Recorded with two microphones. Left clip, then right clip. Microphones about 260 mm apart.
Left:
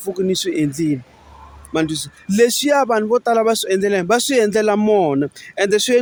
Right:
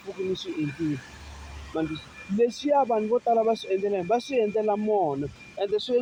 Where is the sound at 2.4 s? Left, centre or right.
Left.